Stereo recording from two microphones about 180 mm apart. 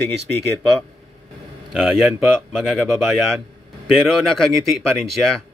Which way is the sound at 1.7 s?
Centre (ahead or behind).